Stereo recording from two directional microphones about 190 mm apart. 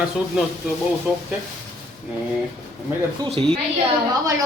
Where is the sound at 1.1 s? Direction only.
5° right (ahead or behind).